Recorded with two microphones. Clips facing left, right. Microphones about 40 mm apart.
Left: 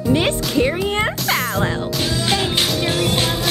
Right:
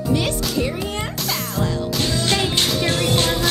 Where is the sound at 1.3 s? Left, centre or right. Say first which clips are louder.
Left 4 dB; centre.